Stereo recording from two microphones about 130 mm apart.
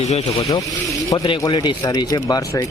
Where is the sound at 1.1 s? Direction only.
40° left (ahead or behind).